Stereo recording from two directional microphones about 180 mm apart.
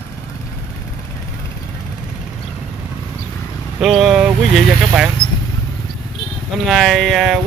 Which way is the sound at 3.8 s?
Centre (ahead or behind).